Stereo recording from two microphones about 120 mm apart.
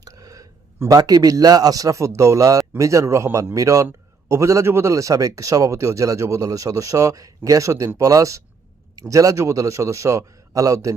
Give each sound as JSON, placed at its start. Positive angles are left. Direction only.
{"t": 0.0, "sound": "a man's voice", "side_deg": -30}